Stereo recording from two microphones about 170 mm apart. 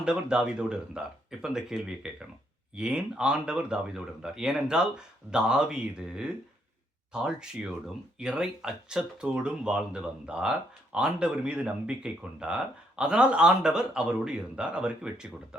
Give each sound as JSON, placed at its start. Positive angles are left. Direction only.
{"t": 0.0, "sound": "speech", "side_deg": -5}